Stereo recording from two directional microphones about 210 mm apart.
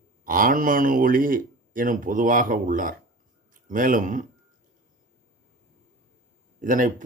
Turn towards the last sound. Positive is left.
turn(degrees=-40)  # may be behind; listen again after turning